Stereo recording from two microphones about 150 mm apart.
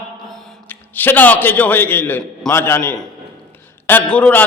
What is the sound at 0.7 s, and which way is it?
A man's voice, 10° left (ahead or behind).